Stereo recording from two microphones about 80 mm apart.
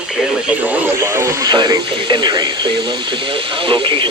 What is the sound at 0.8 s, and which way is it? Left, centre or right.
Speech, right.